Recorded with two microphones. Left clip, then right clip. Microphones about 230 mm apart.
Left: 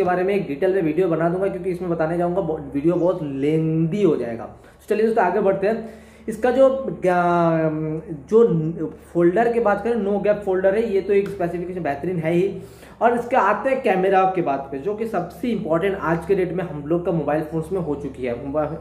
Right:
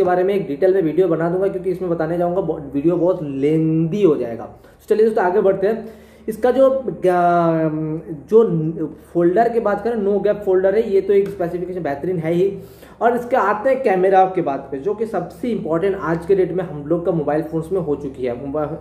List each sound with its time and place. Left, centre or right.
0.0 s a man's voice: centre